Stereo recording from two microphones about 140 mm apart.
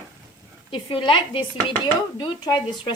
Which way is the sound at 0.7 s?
40° left (ahead or behind).